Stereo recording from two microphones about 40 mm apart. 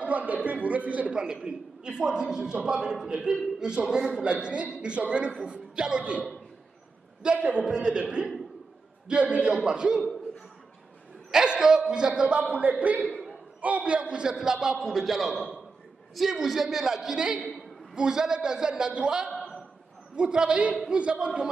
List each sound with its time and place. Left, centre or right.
0.0 s a sound: right
1.1 s a man's voice: centre
7.2 s speech: right
7.7 s a man's voice: right
11.4 s a man's voice: right
12.2 s a man's voice: right